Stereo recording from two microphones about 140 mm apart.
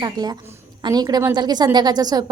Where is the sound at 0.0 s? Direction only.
30° right (ahead or behind).